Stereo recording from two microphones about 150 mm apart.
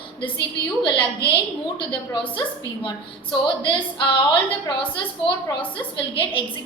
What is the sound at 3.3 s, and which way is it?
A woman's voice, 30° left (ahead or behind).